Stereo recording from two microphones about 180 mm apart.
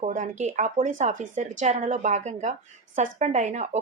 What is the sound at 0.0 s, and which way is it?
A woman's voice, 40° right (ahead or behind).